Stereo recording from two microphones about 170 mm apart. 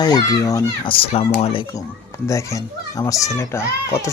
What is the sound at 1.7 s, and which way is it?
Speech, 20° left (ahead or behind).